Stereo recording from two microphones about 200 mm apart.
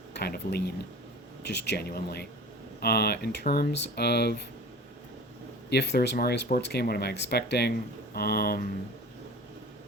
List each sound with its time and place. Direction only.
0.1 s speech: 55° left (ahead or behind)
5.7 s speech: 55° left (ahead or behind)